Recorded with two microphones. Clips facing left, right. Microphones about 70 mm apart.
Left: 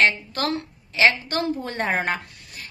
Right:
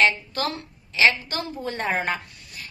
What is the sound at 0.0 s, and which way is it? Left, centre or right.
A woman's voice, left.